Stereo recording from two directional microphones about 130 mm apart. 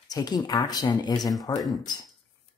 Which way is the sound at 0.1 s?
30° left (ahead or behind).